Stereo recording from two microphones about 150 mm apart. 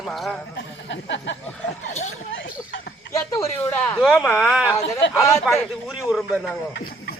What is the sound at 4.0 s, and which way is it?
A man's voice, centre (ahead or behind).